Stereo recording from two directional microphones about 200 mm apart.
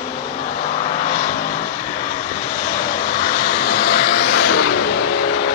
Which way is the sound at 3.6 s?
50° left (ahead or behind).